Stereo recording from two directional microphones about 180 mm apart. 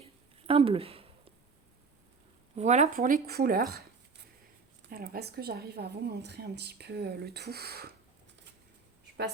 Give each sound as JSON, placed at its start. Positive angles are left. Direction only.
{"t": 0.4, "sound": "speech", "side_deg": -30}
{"t": 2.6, "sound": "speech", "side_deg": -40}
{"t": 4.9, "sound": "a woman's voice", "side_deg": -55}